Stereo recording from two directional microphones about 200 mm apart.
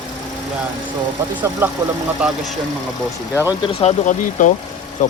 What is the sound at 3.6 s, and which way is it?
Speech, 30° left (ahead or behind).